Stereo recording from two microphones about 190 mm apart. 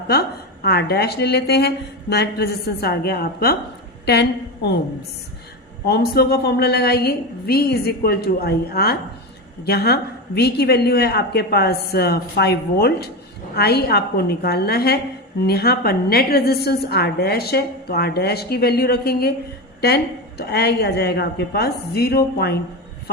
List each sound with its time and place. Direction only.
0.1 s a woman's voice: 55° left (ahead or behind)
5.8 s a woman's voice: 55° left (ahead or behind)